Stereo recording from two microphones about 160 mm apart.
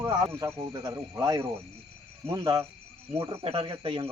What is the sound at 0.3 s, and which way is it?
Speech, 15° right (ahead or behind).